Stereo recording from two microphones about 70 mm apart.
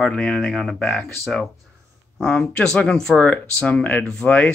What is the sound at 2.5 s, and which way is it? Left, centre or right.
Speech, centre.